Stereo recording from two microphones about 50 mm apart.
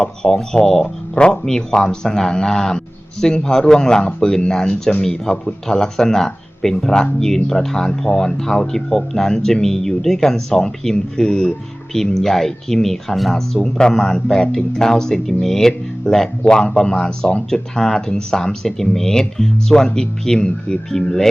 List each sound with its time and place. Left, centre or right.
0.0 s speech: centre; by 5.0 s left
5.3 s speech: centre